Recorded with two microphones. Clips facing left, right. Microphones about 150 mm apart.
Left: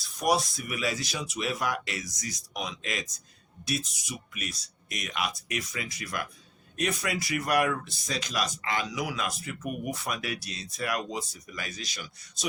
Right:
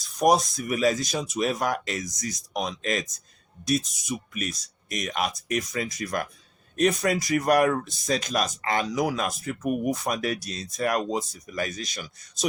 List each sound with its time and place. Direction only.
0.2 s speech: 45° right (ahead or behind)